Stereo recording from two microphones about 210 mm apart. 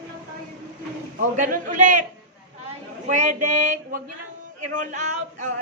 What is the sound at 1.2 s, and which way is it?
Speech, 40° right (ahead or behind).